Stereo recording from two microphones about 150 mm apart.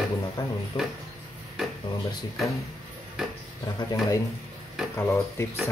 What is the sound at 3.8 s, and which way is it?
Speech, 25° left (ahead or behind).